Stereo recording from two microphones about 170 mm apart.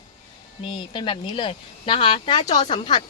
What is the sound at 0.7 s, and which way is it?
Speech, 30° left (ahead or behind).